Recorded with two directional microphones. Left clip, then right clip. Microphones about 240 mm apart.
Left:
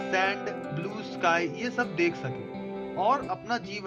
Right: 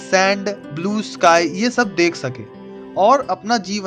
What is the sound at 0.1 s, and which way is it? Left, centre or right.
Speech, right.